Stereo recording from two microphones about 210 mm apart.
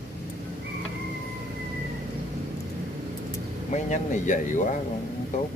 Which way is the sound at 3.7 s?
35° left (ahead or behind).